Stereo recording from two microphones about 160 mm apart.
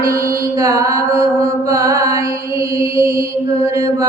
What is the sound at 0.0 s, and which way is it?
Mantra, 20° right (ahead or behind).